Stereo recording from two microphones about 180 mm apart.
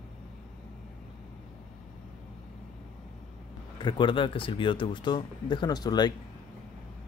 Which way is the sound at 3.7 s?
25° left (ahead or behind).